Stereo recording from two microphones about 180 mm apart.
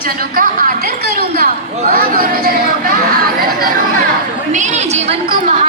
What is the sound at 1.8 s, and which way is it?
Chatter, 55° right (ahead or behind).